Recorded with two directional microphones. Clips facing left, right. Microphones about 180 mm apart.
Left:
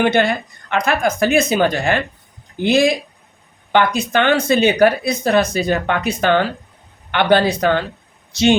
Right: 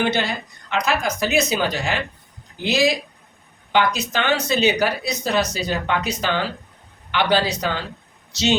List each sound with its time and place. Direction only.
0.0 s speech: 55° left (ahead or behind)